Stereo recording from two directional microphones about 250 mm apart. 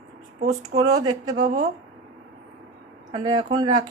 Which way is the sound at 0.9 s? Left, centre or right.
Centre.